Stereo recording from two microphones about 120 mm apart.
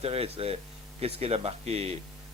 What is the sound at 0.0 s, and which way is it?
A man's voice, 55° right (ahead or behind).